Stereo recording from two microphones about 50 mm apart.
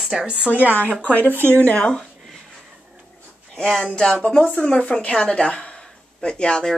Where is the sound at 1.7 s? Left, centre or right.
Centre.